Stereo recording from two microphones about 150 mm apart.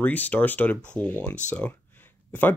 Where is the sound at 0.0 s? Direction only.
10° left (ahead or behind).